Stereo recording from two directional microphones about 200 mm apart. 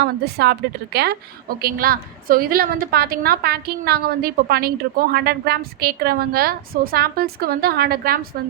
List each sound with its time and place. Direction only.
0.0 s a woman's voice: 55° right (ahead or behind)